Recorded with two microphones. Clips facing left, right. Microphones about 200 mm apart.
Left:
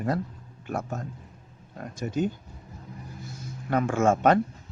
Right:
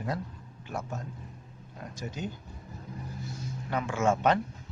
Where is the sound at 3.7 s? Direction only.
50° left (ahead or behind).